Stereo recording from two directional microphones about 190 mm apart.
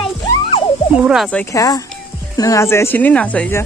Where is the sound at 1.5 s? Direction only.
20° left (ahead or behind).